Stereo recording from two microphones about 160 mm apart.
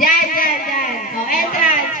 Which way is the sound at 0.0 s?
60° left (ahead or behind).